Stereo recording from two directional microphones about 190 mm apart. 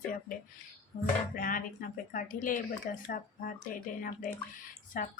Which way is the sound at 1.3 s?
45° left (ahead or behind).